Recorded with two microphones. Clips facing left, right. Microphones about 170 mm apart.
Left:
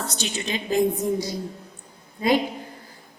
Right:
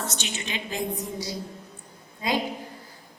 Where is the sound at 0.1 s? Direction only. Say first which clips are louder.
Left 5 dB; 35° left (ahead or behind).